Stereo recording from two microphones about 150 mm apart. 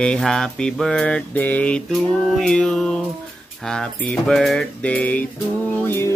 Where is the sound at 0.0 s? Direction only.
5° left (ahead or behind).